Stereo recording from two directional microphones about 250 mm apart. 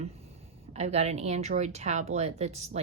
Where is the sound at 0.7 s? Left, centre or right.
Right.